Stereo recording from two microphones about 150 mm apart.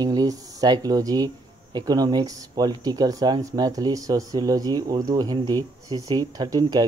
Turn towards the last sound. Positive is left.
turn(degrees=-25)  # may be behind; listen again after turning